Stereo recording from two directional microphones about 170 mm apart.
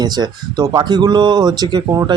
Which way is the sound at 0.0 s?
20° right (ahead or behind).